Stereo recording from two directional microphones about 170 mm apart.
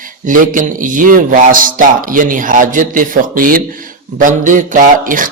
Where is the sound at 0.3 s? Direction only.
50° right (ahead or behind).